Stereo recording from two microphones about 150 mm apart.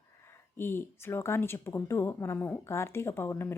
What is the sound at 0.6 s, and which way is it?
Speech, 15° left (ahead or behind).